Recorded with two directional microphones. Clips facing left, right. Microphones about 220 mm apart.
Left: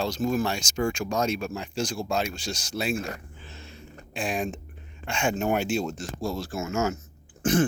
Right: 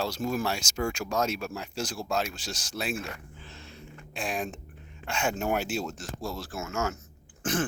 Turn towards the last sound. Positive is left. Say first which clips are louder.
# left 6 dB
turn(degrees=0)  # may be behind; listen again after turning